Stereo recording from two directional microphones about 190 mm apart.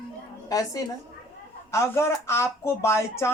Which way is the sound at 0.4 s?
20° left (ahead or behind).